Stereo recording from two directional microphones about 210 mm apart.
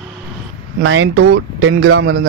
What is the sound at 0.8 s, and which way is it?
Speech, 70° right (ahead or behind).